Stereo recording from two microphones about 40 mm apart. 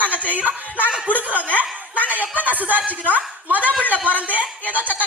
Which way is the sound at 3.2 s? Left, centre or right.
Right.